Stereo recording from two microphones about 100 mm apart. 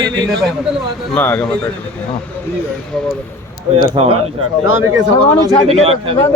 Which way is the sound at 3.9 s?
70° right (ahead or behind).